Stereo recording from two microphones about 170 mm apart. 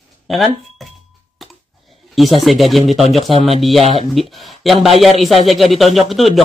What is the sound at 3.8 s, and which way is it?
Speech, 40° right (ahead or behind).